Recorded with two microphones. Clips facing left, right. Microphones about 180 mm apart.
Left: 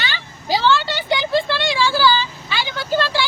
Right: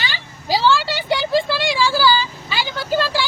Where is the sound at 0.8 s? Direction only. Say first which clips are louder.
Even; 5° right (ahead or behind).